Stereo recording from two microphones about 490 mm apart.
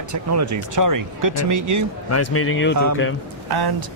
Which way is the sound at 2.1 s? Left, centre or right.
Left.